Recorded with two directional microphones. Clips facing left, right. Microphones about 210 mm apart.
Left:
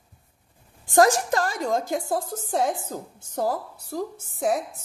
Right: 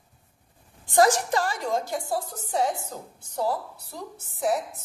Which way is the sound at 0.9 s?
45° left (ahead or behind).